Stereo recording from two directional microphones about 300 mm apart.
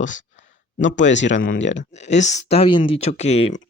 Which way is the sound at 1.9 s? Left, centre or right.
Left.